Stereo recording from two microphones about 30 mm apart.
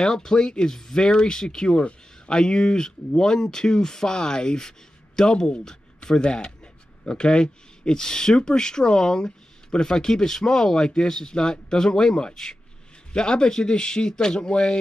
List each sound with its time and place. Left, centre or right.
0.0 s speech: left
1.8 s speech: left